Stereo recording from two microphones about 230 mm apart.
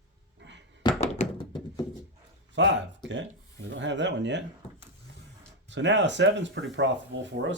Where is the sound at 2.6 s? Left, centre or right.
Right.